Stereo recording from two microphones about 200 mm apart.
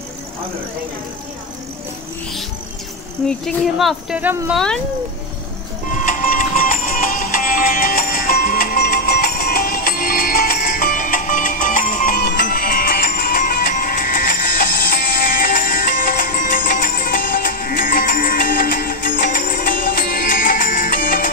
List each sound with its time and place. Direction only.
3.3 s speech: centre (ahead or behind)
4.6 s speech: centre (ahead or behind)
5.9 s music: 40° left (ahead or behind)